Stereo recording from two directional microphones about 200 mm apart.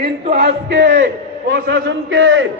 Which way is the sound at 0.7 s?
65° right (ahead or behind).